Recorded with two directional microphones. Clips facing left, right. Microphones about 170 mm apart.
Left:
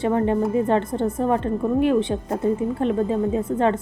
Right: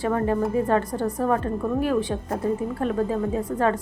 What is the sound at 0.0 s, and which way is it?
A woman's voice, 25° left (ahead or behind).